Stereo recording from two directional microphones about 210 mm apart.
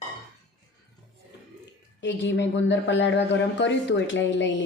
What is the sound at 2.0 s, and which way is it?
Speech, 55° left (ahead or behind).